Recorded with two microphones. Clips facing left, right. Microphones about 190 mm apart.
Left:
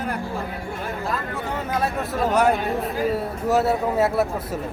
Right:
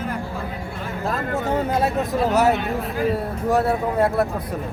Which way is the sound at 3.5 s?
5° left (ahead or behind).